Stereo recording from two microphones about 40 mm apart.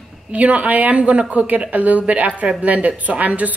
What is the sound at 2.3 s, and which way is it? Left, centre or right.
Speech, right.